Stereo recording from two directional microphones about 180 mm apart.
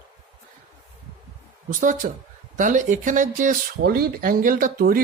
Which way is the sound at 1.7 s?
45° right (ahead or behind).